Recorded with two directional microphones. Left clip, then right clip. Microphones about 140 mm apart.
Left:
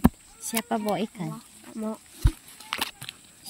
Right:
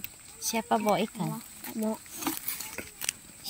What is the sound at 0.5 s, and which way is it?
Speech, 40° left (ahead or behind).